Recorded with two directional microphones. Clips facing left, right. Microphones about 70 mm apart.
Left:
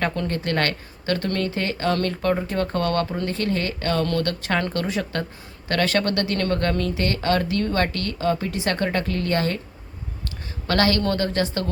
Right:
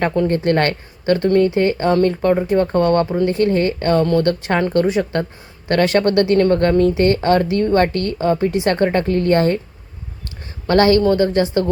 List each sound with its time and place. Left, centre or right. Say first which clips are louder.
0.0 s speech: right 8 dB; right
10.7 s speech: right 8 dB; right
11.0 s a woman's voice: right 8 dB; centre